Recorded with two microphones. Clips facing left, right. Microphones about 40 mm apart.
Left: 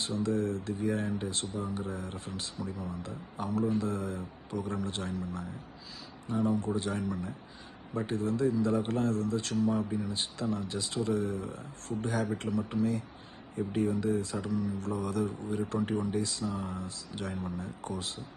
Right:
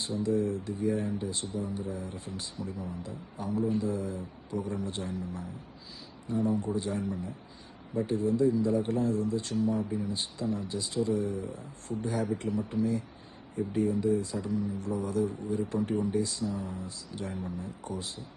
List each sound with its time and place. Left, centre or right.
0.0 s speech: left